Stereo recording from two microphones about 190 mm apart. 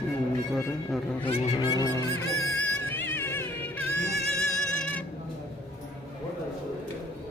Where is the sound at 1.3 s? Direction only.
30° left (ahead or behind); by 5.0 s 5° left (ahead or behind).